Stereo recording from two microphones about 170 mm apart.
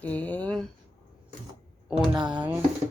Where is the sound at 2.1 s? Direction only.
25° right (ahead or behind).